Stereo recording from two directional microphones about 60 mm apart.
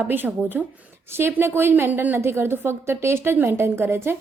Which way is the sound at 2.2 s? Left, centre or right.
Right.